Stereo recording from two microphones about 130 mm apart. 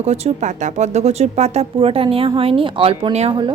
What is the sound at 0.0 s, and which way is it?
Speech, 55° right (ahead or behind).